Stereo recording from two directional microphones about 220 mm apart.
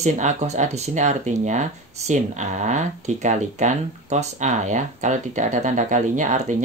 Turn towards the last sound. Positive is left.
turn(degrees=-35)  # may be behind; listen again after turning